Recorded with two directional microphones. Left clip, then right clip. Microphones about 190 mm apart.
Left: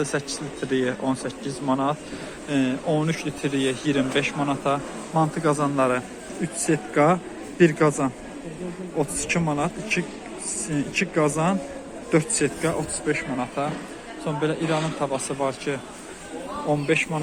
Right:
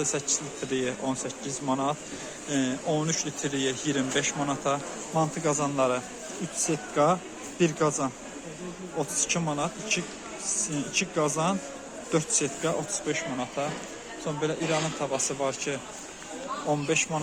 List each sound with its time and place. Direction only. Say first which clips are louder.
0.0 s a man's voice: left 3 dB; 20° right (ahead or behind)